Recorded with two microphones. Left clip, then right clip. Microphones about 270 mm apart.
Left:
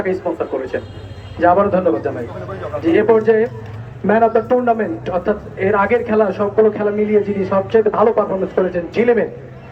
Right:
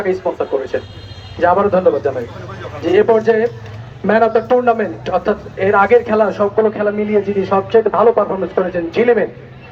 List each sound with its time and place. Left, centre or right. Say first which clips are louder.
0.0 s speech: right 2 dB; right